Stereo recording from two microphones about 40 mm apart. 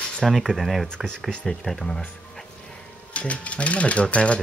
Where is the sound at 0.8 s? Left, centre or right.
Left.